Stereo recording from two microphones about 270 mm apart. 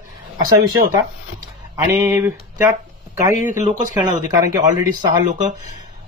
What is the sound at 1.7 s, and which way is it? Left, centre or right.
Speech, centre.